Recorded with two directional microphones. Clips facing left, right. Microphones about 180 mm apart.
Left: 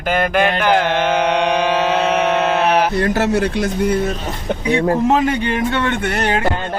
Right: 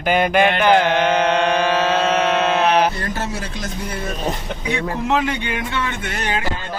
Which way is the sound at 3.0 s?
70° left (ahead or behind).